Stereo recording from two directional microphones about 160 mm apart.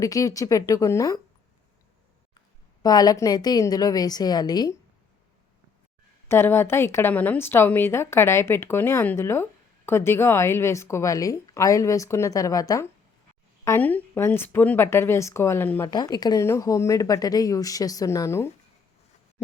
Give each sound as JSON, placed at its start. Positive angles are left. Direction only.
{"t": 0.0, "sound": "speech", "side_deg": 20}
{"t": 2.8, "sound": "speech", "side_deg": 25}
{"t": 6.2, "sound": "speech", "side_deg": 15}
{"t": 15.9, "sound": "speech", "side_deg": 25}